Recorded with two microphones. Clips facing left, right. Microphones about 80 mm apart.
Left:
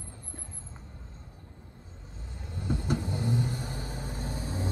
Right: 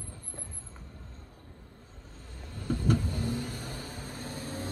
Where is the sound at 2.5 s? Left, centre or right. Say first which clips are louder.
Even; centre.